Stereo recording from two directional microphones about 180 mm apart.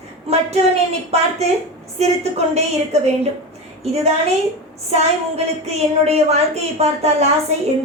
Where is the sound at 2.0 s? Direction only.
35° right (ahead or behind).